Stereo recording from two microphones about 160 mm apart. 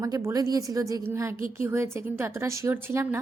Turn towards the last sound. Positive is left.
turn(degrees=-15)  # may be behind; listen again after turning